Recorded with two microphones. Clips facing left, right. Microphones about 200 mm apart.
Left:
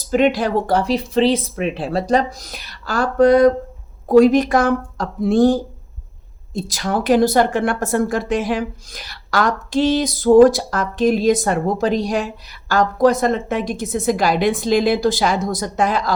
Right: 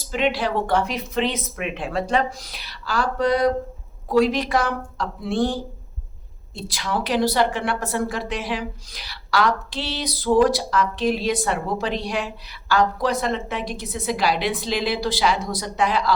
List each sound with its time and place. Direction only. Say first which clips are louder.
0.1 s speech: left 6 dB; 45° left (ahead or behind)